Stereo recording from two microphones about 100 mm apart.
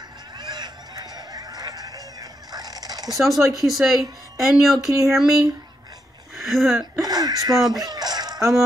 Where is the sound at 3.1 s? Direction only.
Centre (ahead or behind).